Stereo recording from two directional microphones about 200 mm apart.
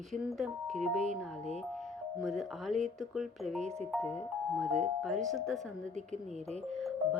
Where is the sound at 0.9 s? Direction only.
35° right (ahead or behind).